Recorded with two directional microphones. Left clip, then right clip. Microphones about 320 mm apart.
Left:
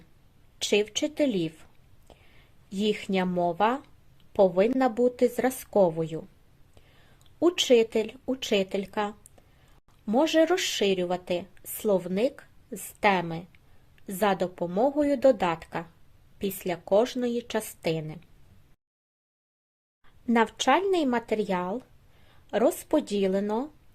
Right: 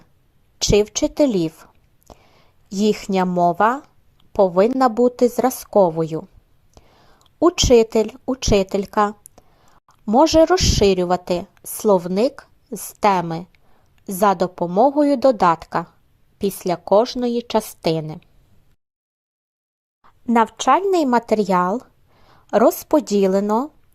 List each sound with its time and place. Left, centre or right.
0.6 s a woman's voice: centre
6.8 s whispering: right
7.3 s a woman's voice: centre
20.3 s a woman's voice: centre